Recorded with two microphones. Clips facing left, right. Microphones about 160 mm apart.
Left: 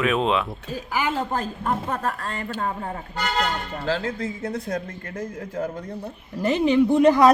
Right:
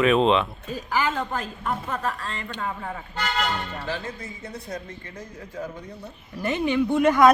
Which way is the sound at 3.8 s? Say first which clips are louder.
Left 6 dB; 90° left.